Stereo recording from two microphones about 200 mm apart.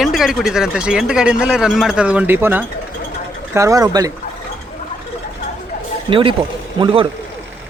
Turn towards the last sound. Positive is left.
turn(degrees=-25)  # may be behind; listen again after turning